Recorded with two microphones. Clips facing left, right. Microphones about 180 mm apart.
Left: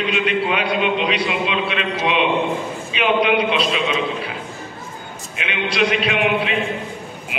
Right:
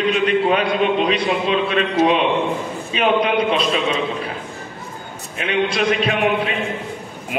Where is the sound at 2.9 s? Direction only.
40° right (ahead or behind).